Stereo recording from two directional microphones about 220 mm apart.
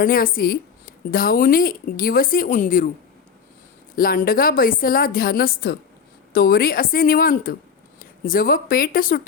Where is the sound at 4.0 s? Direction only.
40° left (ahead or behind).